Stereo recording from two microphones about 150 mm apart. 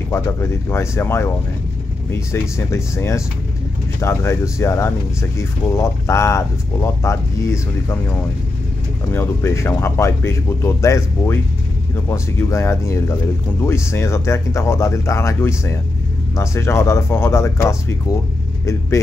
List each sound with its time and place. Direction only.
0.1 s speech: 15° left (ahead or behind)